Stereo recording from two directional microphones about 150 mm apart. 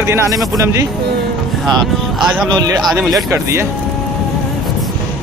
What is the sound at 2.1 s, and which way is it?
Speech, 5° right (ahead or behind).